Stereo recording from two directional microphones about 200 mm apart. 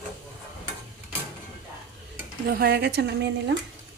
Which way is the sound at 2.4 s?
50° right (ahead or behind).